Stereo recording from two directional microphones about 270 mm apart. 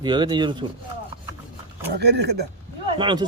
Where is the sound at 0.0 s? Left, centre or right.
Centre.